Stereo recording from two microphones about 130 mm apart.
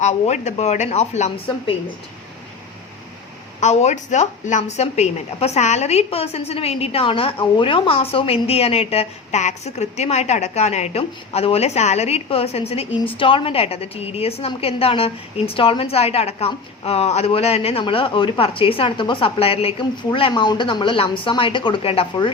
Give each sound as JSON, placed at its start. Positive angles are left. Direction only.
{"t": 0.0, "sound": "speech", "side_deg": 60}
{"t": 3.6, "sound": "a woman's voice", "side_deg": 60}